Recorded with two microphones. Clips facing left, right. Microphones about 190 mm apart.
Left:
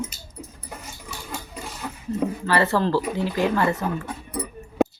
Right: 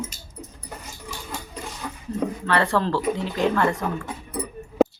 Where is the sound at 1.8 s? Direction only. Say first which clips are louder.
Left 2 dB; 5° left (ahead or behind).